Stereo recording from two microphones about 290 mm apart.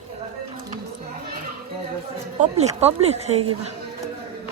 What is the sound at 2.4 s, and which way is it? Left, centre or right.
Speech, right.